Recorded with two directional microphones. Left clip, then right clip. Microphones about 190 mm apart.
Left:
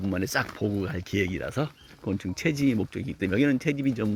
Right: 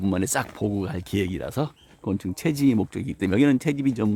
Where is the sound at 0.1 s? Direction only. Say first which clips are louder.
Right 1 dB; 15° right (ahead or behind).